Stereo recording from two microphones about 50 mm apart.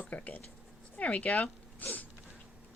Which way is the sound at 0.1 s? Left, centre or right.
Left.